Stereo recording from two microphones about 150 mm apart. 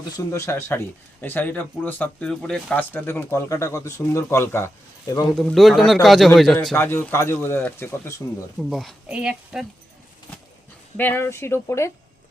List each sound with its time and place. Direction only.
0.3 s speech: 20° left (ahead or behind)
5.3 s a man's voice: centre (ahead or behind)
6.7 s speech: 15° left (ahead or behind)
8.7 s a man's voice: centre (ahead or behind)
10.9 s speech: 15° left (ahead or behind)